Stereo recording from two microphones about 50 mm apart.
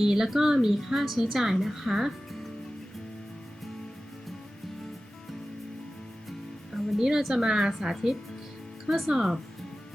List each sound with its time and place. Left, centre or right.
0.0 s a woman's voice: centre
6.7 s a woman's voice: centre